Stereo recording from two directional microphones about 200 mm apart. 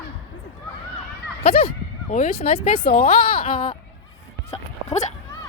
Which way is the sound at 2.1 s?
45° left (ahead or behind).